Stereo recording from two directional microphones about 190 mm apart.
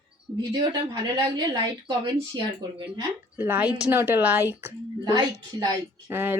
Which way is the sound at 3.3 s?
10° right (ahead or behind).